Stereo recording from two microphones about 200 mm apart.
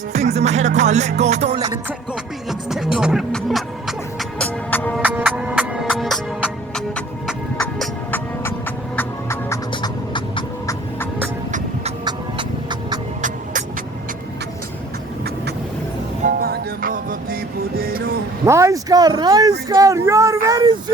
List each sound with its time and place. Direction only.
0.1 s music: 35° right (ahead or behind)
2.5 s music: centre (ahead or behind)
5.0 s music: 10° right (ahead or behind); by 8.5 s 10° left (ahead or behind)
9.0 s a sound: 15° left (ahead or behind)
16.2 s music: 45° right (ahead or behind)
18.4 s speech: 15° right (ahead or behind)